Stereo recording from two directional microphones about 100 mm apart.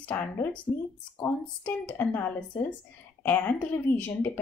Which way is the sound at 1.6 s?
20° left (ahead or behind).